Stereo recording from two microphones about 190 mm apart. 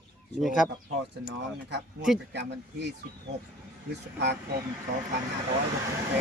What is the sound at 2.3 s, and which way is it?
Speech, 65° right (ahead or behind).